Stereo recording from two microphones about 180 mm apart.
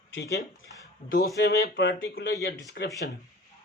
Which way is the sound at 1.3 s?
70° left (ahead or behind).